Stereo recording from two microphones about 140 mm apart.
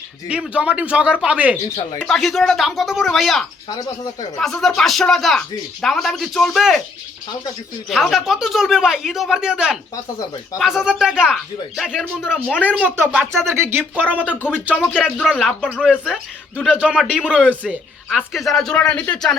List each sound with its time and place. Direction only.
0.3 s speech: 10° right (ahead or behind)
3.7 s speech: 25° left (ahead or behind)
4.4 s speech: 5° left (ahead or behind)
7.9 s speech: centre (ahead or behind)
14.3 s speech: 15° left (ahead or behind)
14.9 s speech: centre (ahead or behind)